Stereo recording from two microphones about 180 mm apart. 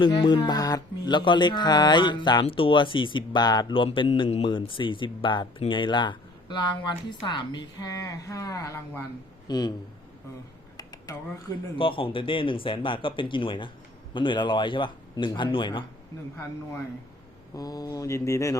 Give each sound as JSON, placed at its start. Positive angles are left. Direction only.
{"t": 0.0, "sound": "speech", "side_deg": 25}
{"t": 10.8, "sound": "speech", "side_deg": 20}
{"t": 17.5, "sound": "speech", "side_deg": 20}